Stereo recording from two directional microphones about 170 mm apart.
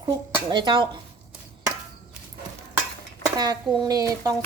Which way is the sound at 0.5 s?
25° right (ahead or behind).